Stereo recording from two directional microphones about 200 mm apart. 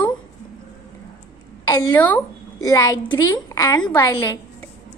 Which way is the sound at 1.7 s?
15° left (ahead or behind).